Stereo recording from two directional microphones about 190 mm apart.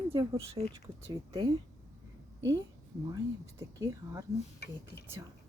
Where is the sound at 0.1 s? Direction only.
20° right (ahead or behind).